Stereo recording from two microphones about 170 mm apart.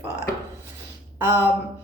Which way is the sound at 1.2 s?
10° right (ahead or behind).